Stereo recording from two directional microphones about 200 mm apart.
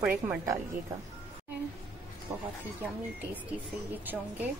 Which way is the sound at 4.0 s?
10° right (ahead or behind).